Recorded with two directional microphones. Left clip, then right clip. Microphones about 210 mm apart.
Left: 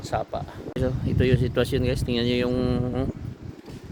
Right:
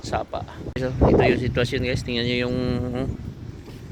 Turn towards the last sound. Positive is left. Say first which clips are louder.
# even
turn(degrees=10)  # may be behind; listen again after turning